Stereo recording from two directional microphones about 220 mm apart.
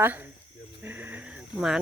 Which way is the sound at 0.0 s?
10° right (ahead or behind).